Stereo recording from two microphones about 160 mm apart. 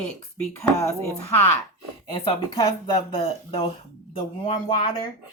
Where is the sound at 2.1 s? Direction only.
30° left (ahead or behind).